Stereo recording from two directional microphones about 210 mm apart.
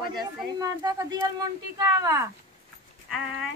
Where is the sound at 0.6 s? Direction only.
15° right (ahead or behind).